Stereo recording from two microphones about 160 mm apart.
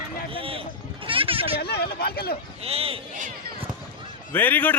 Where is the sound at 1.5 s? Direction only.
80° left.